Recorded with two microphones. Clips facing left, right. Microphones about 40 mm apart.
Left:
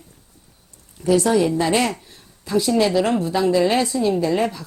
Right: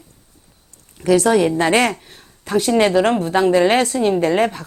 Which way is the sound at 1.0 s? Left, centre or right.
Right.